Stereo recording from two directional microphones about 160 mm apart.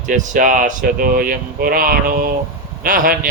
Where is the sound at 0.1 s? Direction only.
50° right (ahead or behind).